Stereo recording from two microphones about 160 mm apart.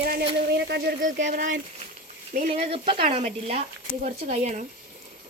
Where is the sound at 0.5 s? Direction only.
90° right.